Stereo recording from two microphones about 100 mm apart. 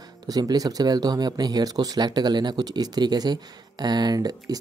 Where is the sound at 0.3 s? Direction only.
40° right (ahead or behind).